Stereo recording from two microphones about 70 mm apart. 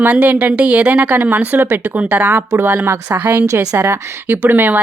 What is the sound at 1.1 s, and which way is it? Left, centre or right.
Speech, right.